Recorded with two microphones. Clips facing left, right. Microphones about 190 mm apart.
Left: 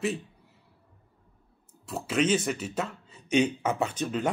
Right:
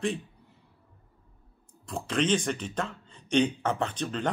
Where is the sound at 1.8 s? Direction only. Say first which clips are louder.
Left 2 dB; 5° left (ahead or behind).